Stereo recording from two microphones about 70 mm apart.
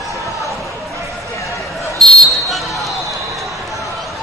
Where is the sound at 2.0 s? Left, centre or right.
Centre.